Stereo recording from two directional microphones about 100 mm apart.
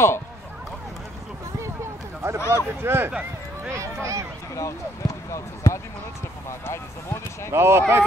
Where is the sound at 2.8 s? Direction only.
25° right (ahead or behind).